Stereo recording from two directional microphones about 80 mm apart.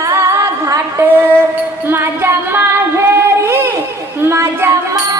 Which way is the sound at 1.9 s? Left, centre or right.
Right.